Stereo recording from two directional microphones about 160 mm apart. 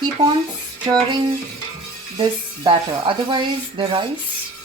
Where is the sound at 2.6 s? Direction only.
30° right (ahead or behind).